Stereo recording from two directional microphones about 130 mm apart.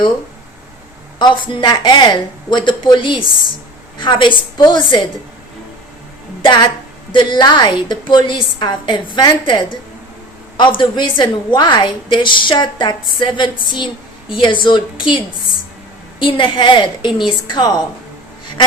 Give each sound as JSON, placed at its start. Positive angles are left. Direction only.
{"t": 1.2, "sound": "a woman's voice", "side_deg": 40}
{"t": 6.4, "sound": "a woman's voice", "side_deg": 35}
{"t": 16.2, "sound": "a woman's voice", "side_deg": 40}